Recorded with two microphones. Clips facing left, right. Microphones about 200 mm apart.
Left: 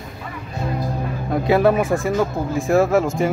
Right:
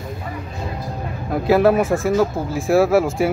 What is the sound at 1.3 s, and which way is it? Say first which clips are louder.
Speech: right 1 dB; 5° right (ahead or behind).